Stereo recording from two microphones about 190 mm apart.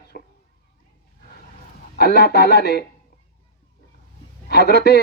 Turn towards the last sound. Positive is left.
turn(degrees=60)  # may be behind; listen again after turning